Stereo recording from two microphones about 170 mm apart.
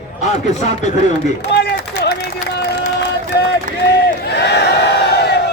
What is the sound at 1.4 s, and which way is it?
Speech, 75° left (ahead or behind).